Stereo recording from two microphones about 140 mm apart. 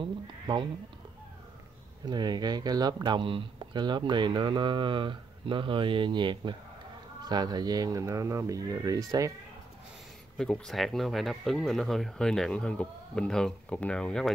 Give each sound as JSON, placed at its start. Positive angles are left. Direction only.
{"t": 0.0, "sound": "sheep", "side_deg": -35}
{"t": 2.0, "sound": "speech", "side_deg": -30}
{"t": 10.3, "sound": "speech", "side_deg": 5}